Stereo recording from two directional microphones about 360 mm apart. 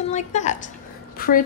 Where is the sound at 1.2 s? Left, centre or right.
Left.